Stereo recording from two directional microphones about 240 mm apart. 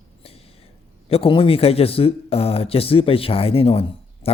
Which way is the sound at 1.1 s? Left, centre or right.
Left.